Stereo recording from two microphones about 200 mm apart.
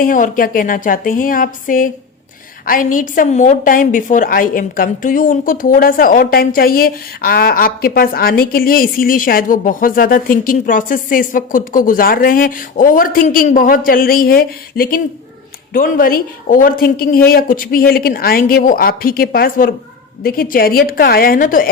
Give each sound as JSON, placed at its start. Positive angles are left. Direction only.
{"t": 0.0, "sound": "a woman's voice", "side_deg": 45}